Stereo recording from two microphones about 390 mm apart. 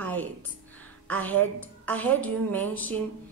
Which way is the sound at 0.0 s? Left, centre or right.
Centre.